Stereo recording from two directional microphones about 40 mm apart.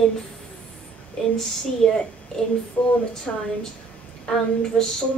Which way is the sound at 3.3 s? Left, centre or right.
Left.